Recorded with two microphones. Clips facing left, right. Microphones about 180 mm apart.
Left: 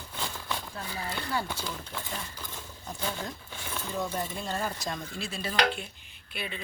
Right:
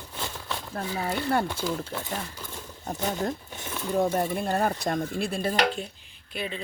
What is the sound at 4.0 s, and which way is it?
Speech, 60° right (ahead or behind).